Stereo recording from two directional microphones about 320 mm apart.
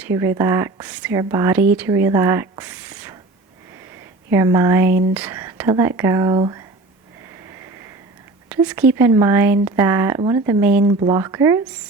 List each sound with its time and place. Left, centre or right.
0.0 s speech: centre
4.3 s speech: centre
8.4 s speech: centre